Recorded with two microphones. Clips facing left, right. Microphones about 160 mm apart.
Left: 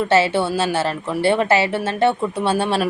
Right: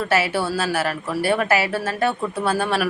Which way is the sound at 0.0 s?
25° left (ahead or behind).